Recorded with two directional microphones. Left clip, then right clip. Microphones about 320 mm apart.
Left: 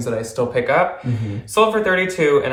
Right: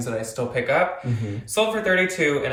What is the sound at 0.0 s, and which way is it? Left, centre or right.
Speech, centre.